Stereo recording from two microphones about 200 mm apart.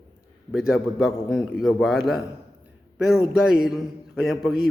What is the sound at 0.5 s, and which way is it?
A man's voice, centre (ahead or behind).